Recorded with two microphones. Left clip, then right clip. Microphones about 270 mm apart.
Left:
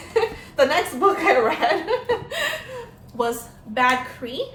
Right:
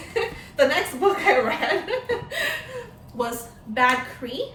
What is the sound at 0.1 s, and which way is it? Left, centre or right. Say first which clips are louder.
Chuckle: left 5 dB; centre.